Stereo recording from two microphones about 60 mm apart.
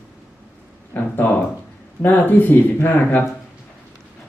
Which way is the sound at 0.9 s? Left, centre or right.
Left.